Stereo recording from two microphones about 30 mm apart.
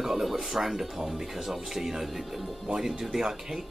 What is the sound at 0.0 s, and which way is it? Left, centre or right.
Speech, centre.